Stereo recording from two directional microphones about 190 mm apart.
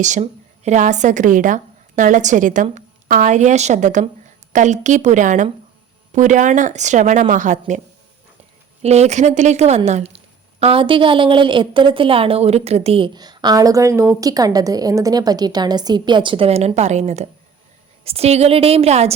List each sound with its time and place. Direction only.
0.0 s a woman's voice: 40° right (ahead or behind)
8.8 s a woman's voice: 35° right (ahead or behind)